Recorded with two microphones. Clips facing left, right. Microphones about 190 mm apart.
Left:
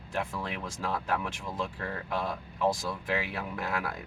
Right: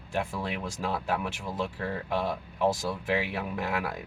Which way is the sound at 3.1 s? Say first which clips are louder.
Right 3 dB; 15° right (ahead or behind).